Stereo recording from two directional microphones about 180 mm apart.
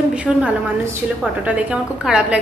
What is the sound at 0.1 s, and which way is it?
A woman's voice, 5° right (ahead or behind).